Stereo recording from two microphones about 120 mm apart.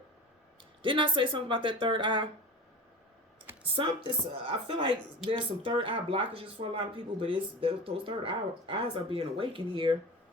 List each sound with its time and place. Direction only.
0.8 s speech: 45° right (ahead or behind)
3.6 s speech: 50° right (ahead or behind)